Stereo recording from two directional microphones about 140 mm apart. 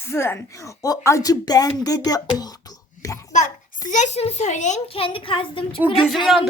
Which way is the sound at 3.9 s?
55° left (ahead or behind).